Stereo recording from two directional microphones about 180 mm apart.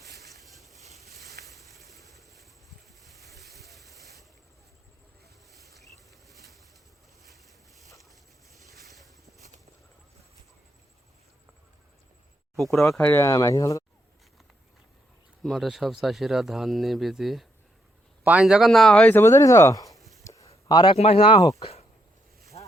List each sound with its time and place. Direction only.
0.0 s boat: centre (ahead or behind)
5.5 s insect: centre (ahead or behind)
6.2 s bird: centre (ahead or behind)
7.3 s boat: centre (ahead or behind)
12.7 s speech: centre (ahead or behind); by 13.8 s 20° left (ahead or behind)
15.4 s speech: centre (ahead or behind); by 20.0 s 20° left (ahead or behind)
20.0 s a sound: centre (ahead or behind)
20.2 s a sound: 15° left (ahead or behind)
20.7 s speech: 25° left (ahead or behind)
21.6 s a sound: 35° left (ahead or behind)